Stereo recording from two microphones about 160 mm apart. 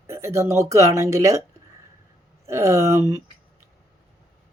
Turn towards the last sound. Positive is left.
turn(degrees=-20)  # may be behind; listen again after turning